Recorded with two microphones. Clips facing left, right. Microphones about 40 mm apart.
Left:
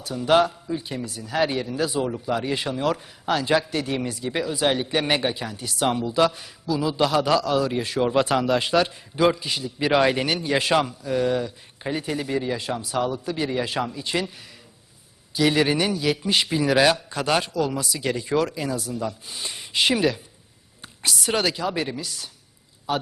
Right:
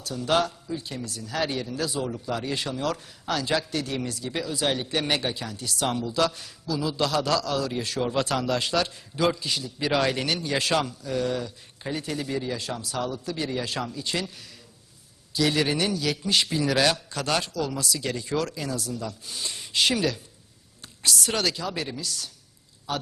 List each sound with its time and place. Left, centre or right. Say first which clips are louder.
0.0 s a man's voice: left 5 dB; left